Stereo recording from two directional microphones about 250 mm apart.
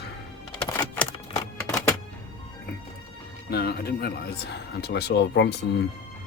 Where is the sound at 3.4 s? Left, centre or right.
Left.